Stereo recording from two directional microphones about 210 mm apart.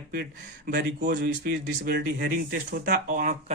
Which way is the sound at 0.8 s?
40° right (ahead or behind).